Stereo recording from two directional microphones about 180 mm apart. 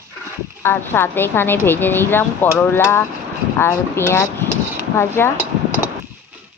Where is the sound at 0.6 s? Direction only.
10° left (ahead or behind).